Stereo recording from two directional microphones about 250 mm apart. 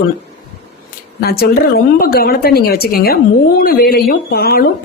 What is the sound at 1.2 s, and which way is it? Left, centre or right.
A woman's voice, left.